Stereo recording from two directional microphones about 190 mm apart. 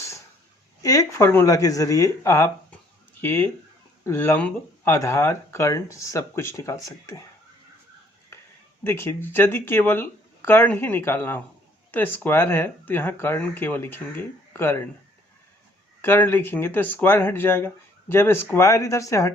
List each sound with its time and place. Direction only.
0.8 s speech: 15° left (ahead or behind)
8.8 s speech: 10° left (ahead or behind)
16.0 s speech: 10° left (ahead or behind)